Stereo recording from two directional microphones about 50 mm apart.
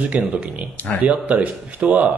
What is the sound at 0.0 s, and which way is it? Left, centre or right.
A man's voice, right.